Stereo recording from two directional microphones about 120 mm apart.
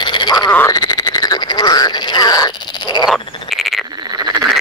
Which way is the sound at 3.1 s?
Centre (ahead or behind).